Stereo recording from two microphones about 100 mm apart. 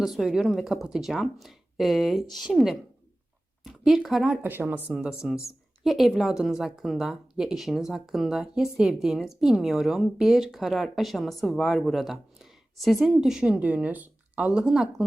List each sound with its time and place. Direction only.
0.0 s speech: 5° right (ahead or behind)
4.4 s speech: 20° right (ahead or behind)